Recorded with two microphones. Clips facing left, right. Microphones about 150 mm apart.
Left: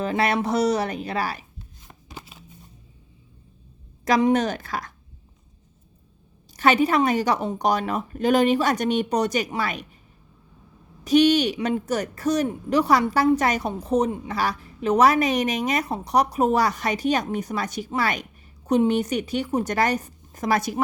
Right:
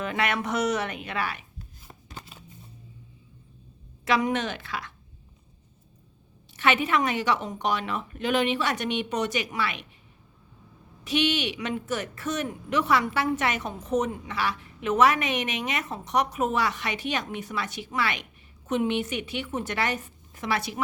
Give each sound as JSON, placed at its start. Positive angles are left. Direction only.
{"t": 0.0, "sound": "a woman's voice", "side_deg": 35}
{"t": 1.9, "sound": "shuffling cards", "side_deg": 5}
{"t": 4.0, "sound": "a woman's voice", "side_deg": 40}
{"t": 6.6, "sound": "a woman's voice", "side_deg": 40}
{"t": 11.0, "sound": "a woman's voice", "side_deg": 40}